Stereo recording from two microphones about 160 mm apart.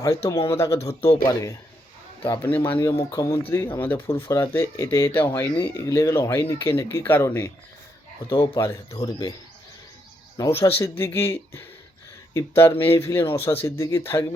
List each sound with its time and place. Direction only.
0.3 s speech: 20° left (ahead or behind)
0.8 s speech: 40° left (ahead or behind)
1.2 s speech: 25° left (ahead or behind)
8.3 s speech: 35° left (ahead or behind)
8.5 s speech: 20° left (ahead or behind)
10.3 s speech: 20° left (ahead or behind)